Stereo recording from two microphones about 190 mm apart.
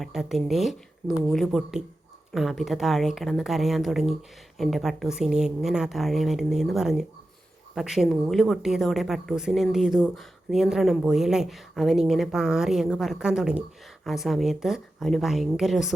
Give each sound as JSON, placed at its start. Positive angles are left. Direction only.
{"t": 0.0, "sound": "a woman's voice", "side_deg": 0}